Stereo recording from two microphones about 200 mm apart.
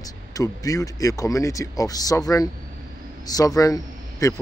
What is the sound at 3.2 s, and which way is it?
A man's voice, 20° left (ahead or behind).